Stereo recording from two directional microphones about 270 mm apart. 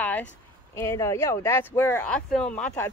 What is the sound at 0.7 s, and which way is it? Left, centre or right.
A woman's voice, centre.